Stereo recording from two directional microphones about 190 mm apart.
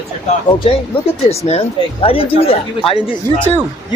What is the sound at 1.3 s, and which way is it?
Speech, 35° left (ahead or behind).